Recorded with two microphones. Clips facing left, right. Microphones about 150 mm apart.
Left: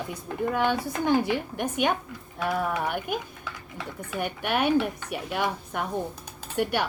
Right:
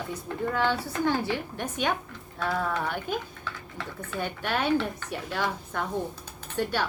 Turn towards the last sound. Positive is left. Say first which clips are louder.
# left 2 dB
turn(degrees=15)  # may be behind; listen again after turning